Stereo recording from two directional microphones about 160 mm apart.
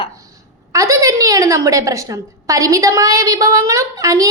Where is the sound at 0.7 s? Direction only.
20° right (ahead or behind).